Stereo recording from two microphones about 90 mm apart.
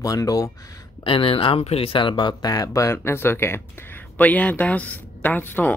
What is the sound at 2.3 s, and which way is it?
Speech, 45° left (ahead or behind).